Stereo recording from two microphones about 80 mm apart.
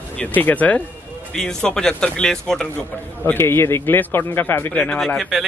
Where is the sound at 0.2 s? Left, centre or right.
Left.